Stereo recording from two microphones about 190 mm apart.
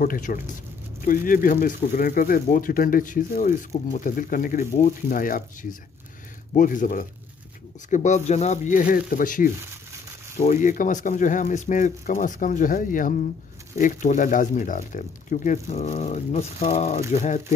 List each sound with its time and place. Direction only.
0.0 s speech: 45° left (ahead or behind)